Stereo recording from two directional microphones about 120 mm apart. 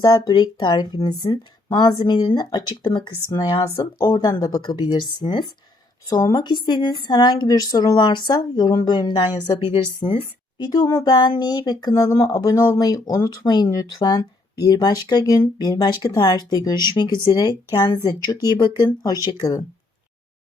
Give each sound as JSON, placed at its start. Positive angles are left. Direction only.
{"t": 0.0, "sound": "a woman's voice", "side_deg": 35}
{"t": 10.6, "sound": "speech", "side_deg": 30}
{"t": 12.5, "sound": "speech", "side_deg": 30}